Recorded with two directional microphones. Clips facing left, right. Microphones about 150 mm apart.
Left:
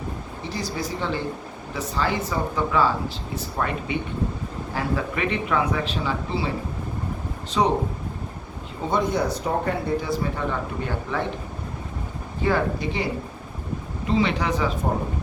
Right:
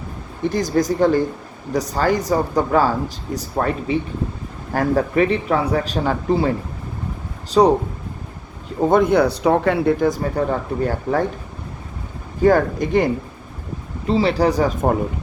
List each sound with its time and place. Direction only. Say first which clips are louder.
0.4 s speech: right 12 dB; 45° right (ahead or behind)
7.6 s speech: right 8 dB; 40° right (ahead or behind)
8.8 s speech: right 9 dB; 50° right (ahead or behind); by 9.9 s 90° right
10.0 s speech: right 7 dB; 40° right (ahead or behind)
12.4 s speech: right 8 dB; 45° right (ahead or behind)
14.1 s speech: right 6 dB; 35° right (ahead or behind)